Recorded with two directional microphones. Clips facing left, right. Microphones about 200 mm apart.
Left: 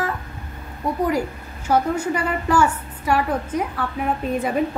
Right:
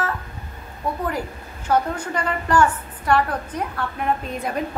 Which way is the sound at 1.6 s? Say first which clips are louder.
Left 2 dB; 10° left (ahead or behind).